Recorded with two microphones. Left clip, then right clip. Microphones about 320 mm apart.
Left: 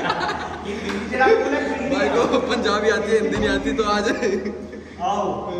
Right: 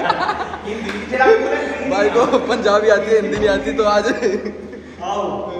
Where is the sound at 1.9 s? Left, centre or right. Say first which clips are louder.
Right 5 dB; centre.